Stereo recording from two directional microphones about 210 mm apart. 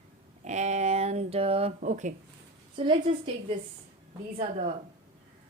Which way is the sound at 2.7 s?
25° right (ahead or behind).